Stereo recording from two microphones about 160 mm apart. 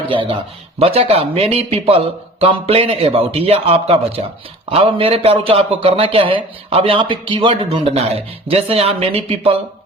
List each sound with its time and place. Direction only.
0.1 s a man's voice: 35° right (ahead or behind)